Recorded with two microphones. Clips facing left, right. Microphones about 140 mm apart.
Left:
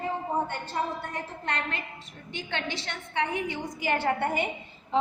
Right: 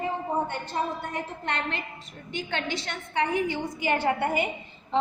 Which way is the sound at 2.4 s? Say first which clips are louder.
Right 1 dB; 40° right (ahead or behind).